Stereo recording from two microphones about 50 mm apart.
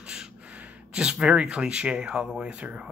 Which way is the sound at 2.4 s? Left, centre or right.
Right.